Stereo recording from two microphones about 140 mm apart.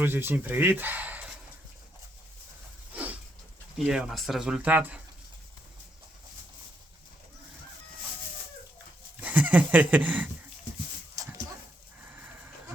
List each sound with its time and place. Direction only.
0.0 s speech: 15° right (ahead or behind)
2.9 s a sound: 10° right (ahead or behind)
3.8 s speech: 5° right (ahead or behind)
9.2 s speech: 10° right (ahead or behind)
11.1 s dog: 25° right (ahead or behind)